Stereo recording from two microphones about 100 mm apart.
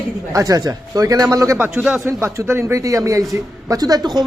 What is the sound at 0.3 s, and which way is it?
Speech, 35° right (ahead or behind).